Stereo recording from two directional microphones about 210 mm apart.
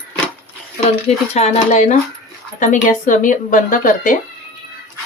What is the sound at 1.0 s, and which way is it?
Speech, 30° left (ahead or behind).